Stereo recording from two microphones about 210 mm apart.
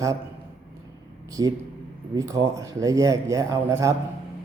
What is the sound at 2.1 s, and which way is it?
Mantra, 15° right (ahead or behind).